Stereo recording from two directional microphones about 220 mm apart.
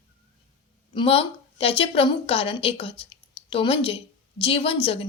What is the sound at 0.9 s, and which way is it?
A woman's voice, 25° left (ahead or behind).